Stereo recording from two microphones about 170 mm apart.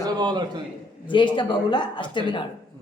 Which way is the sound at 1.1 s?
30° left (ahead or behind).